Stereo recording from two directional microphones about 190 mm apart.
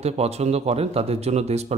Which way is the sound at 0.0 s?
35° right (ahead or behind).